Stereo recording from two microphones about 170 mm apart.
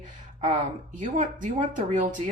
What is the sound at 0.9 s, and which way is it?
Speech, 50° right (ahead or behind).